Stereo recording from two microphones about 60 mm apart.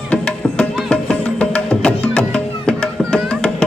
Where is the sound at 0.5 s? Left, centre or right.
Centre.